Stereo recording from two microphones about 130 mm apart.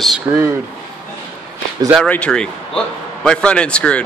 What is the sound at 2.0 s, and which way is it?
A man's voice, 10° left (ahead or behind).